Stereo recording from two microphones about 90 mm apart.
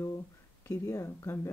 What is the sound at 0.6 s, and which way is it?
Speech, 30° left (ahead or behind).